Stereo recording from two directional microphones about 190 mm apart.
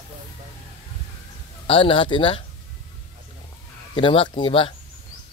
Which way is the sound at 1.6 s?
30° left (ahead or behind).